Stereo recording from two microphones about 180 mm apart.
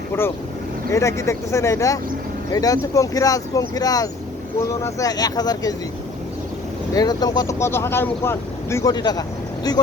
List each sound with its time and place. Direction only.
0.9 s speech: 15° left (ahead or behind)
6.9 s speech: 20° left (ahead or behind)